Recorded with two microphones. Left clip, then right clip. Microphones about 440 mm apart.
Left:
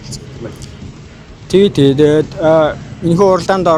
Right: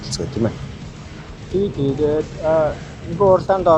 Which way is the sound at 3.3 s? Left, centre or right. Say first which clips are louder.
Left 2 dB; left.